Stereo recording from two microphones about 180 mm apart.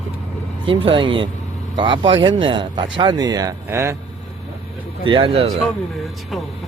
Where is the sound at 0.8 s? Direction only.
30° right (ahead or behind).